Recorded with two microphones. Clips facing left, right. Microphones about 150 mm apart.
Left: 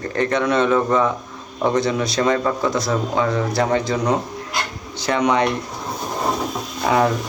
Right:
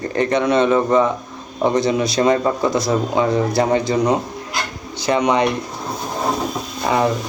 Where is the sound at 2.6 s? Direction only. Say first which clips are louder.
Right 3 dB; centre (ahead or behind).